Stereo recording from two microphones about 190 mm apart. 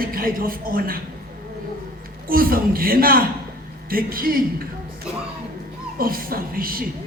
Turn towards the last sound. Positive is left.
turn(degrees=-50)  # may be behind; listen again after turning